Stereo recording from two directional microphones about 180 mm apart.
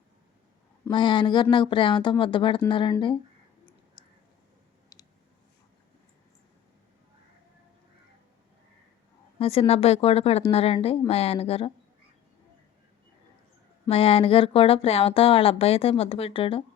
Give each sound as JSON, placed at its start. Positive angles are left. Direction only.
{"t": 0.9, "sound": "speech", "side_deg": 25}
{"t": 9.4, "sound": "speech", "side_deg": 30}
{"t": 13.8, "sound": "speech", "side_deg": 30}